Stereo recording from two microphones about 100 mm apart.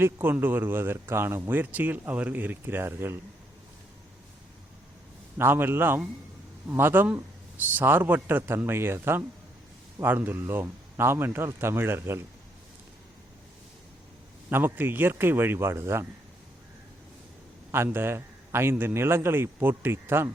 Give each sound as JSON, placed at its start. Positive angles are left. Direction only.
{"t": 0.0, "sound": "speech", "side_deg": -20}
{"t": 5.4, "sound": "speech", "side_deg": -20}
{"t": 14.5, "sound": "speech", "side_deg": -20}
{"t": 17.7, "sound": "speech", "side_deg": -20}